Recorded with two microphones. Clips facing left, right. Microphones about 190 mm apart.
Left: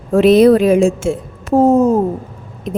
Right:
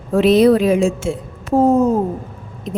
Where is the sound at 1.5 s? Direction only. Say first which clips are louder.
Left 3 dB; 45° left (ahead or behind).